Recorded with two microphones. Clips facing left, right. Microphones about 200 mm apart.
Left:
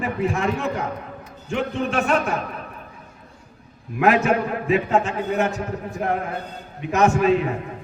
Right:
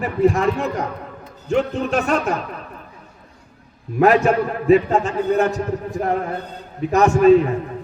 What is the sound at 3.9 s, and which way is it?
A man's voice, 40° right (ahead or behind).